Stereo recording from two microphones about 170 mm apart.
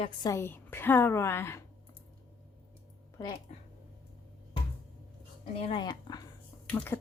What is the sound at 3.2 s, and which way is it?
Speech, 20° left (ahead or behind).